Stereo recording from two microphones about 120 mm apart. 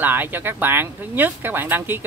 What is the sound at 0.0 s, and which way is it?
Speech, 15° right (ahead or behind).